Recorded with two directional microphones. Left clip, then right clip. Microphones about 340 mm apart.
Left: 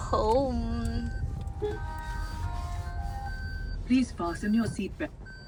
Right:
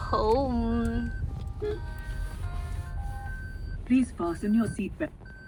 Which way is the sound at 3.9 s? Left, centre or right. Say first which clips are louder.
Right 1 dB; left.